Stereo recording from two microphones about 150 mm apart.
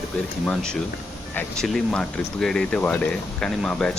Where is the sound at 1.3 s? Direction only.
5° left (ahead or behind).